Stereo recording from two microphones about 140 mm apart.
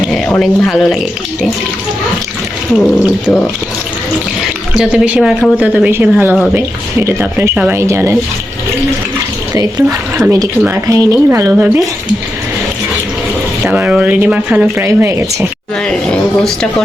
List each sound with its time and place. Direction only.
0.1 s speech: 5° left (ahead or behind)
2.7 s speech: centre (ahead or behind)
4.7 s a woman's voice: 5° right (ahead or behind)
10.2 s a woman's voice: 25° right (ahead or behind)
13.7 s a woman's voice: 10° right (ahead or behind)
14.8 s speech: 20° right (ahead or behind)
15.9 s speech: 5° left (ahead or behind)